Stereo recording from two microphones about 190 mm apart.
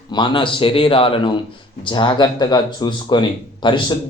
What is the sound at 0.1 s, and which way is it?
Speech, 25° left (ahead or behind).